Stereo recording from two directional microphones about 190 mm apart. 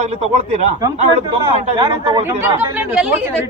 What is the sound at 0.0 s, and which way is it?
A man's voice, 35° right (ahead or behind).